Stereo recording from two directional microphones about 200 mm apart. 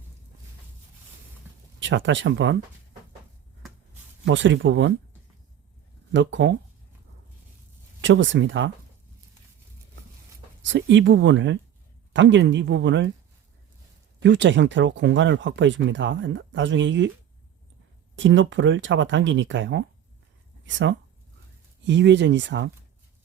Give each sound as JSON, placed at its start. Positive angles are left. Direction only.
{"t": 1.8, "sound": "speech", "side_deg": -65}
{"t": 4.3, "sound": "speech", "side_deg": -65}
{"t": 6.1, "sound": "speech", "side_deg": -65}
{"t": 8.0, "sound": "speech", "side_deg": -70}
{"t": 10.6, "sound": "speech", "side_deg": -65}
{"t": 14.2, "sound": "speech", "side_deg": -60}
{"t": 18.2, "sound": "speech", "side_deg": -70}